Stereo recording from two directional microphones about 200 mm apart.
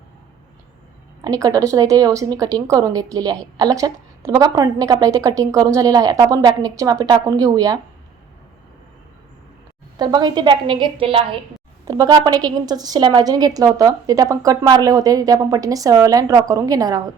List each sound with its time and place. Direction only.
1.2 s speech: 15° right (ahead or behind)
10.0 s a woman's voice: 20° right (ahead or behind)